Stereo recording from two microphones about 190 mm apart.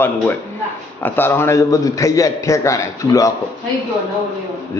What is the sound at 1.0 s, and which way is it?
A man's voice, 10° left (ahead or behind).